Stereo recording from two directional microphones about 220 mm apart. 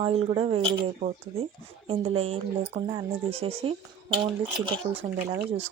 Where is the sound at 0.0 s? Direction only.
25° right (ahead or behind).